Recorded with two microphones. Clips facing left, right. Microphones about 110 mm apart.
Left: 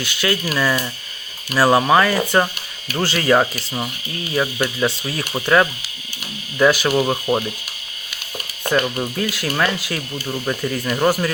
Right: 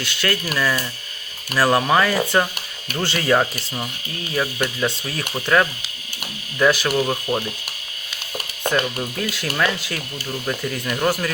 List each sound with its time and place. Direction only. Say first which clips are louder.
0.0 s speech: left 2 dB; 5° left (ahead or behind)
4.4 s speech: left 2 dB; 10° left (ahead or behind)
6.9 s speech: left 3 dB; 20° left (ahead or behind)
9.1 s speech: left 1 dB; 5° left (ahead or behind)